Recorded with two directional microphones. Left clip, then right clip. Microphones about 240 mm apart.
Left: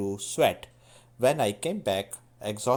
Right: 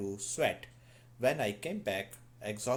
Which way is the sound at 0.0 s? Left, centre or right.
Left.